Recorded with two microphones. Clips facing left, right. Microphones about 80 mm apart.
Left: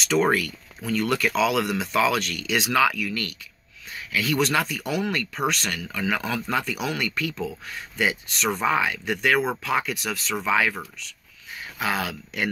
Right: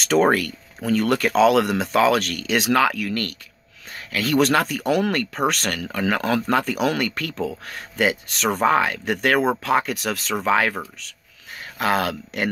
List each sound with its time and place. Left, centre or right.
0.0 s speech: right
11.8 s speech: right